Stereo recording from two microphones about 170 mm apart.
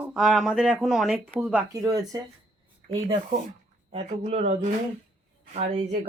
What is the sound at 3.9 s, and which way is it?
Speech, 35° right (ahead or behind).